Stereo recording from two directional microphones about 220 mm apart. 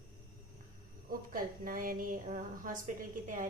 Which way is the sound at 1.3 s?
40° right (ahead or behind).